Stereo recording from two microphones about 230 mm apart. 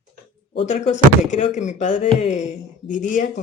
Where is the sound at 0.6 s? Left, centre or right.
Left.